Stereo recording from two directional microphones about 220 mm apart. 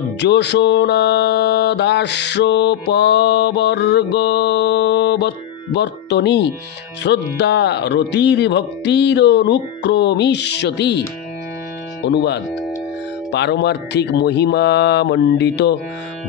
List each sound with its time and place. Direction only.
0.2 s music: 50° left (ahead or behind)